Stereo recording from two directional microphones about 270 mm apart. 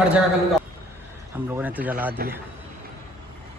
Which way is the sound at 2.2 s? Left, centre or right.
Right.